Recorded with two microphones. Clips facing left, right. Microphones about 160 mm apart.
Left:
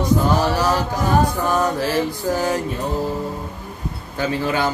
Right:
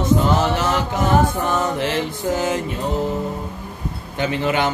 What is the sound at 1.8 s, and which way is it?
Speech, 20° right (ahead or behind).